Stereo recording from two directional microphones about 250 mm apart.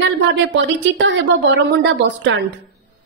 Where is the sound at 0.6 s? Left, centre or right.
Right.